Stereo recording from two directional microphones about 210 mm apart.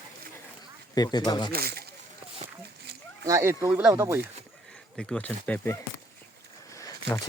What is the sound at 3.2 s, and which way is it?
Speech, 15° right (ahead or behind).